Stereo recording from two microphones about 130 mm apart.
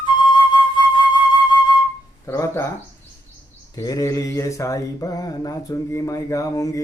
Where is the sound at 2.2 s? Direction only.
20° left (ahead or behind).